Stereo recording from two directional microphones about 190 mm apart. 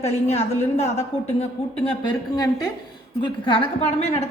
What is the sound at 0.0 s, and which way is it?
A woman's voice, 35° left (ahead or behind).